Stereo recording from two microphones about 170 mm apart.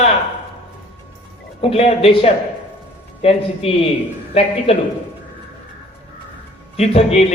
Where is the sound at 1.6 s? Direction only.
35° left (ahead or behind).